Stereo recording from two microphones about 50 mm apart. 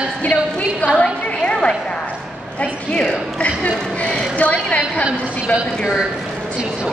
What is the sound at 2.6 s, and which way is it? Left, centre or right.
A woman's voice, left.